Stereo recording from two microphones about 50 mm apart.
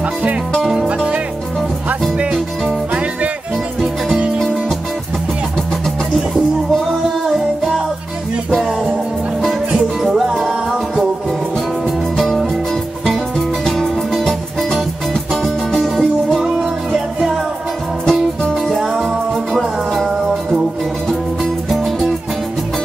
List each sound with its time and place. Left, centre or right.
0.6 s music: centre
0.8 s music: right
7.2 s music: centre
10.2 s music: centre
12.2 s music: centre
14.1 s music: centre
18.0 s music: centre
21.6 s music: centre